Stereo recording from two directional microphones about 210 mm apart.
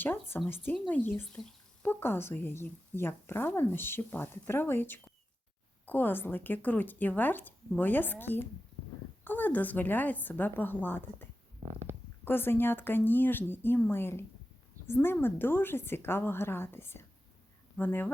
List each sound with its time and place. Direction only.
0.0 s a woman's voice: 10° left (ahead or behind)
11.6 s stomach rumble: 30° right (ahead or behind)
12.2 s a woman's voice: 10° left (ahead or behind)